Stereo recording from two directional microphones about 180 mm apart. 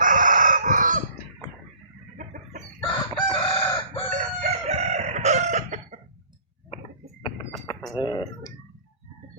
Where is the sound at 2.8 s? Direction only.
25° left (ahead or behind).